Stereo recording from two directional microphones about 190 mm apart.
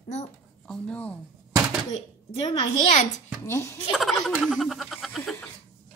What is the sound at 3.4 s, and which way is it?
Speech, 15° left (ahead or behind).